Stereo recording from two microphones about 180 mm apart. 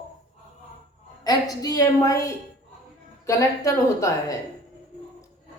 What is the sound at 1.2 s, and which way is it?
A woman's voice, 20° left (ahead or behind).